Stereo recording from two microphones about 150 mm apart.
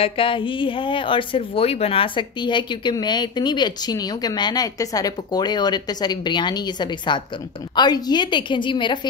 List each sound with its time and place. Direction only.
0.0 s a woman's voice: 35° left (ahead or behind)